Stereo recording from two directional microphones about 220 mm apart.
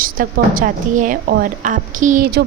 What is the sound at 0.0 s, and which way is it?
A woman's voice, 40° right (ahead or behind).